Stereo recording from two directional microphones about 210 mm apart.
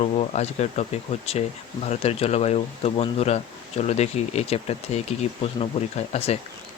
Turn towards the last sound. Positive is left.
turn(degrees=30)  # may be behind; listen again after turning